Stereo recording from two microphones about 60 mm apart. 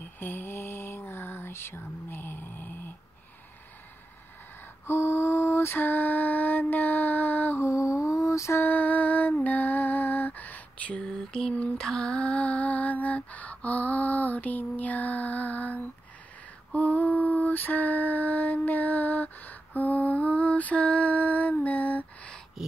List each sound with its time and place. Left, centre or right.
0.0 s a sound: left
4.8 s mantra: left
7.6 s lullaby: left
8.5 s lullaby: left
22.6 s dog: centre